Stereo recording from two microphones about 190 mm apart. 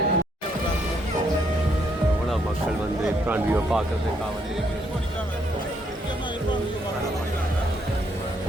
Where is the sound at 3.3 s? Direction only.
10° right (ahead or behind).